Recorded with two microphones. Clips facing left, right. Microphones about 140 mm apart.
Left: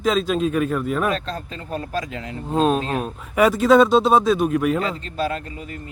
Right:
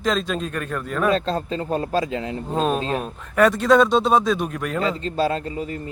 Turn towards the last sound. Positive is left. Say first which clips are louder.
# right 3 dB
turn(degrees=-30)  # may be behind; listen again after turning